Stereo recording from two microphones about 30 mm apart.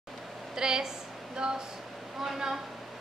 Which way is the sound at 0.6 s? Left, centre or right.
Right.